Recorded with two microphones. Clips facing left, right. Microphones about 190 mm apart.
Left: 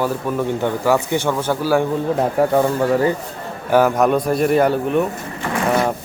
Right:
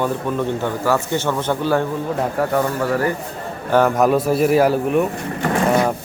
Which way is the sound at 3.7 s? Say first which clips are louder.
Even; centre (ahead or behind).